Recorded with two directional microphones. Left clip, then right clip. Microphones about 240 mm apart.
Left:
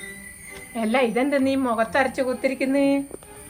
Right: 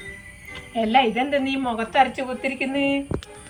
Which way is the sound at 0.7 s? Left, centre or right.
Centre.